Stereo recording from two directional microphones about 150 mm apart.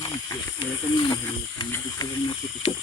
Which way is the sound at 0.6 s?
30° left (ahead or behind).